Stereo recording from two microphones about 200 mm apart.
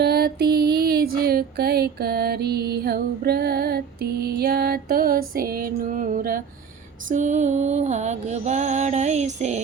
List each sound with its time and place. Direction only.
0.0 s music: 50° right (ahead or behind); by 9.6 s 35° right (ahead or behind)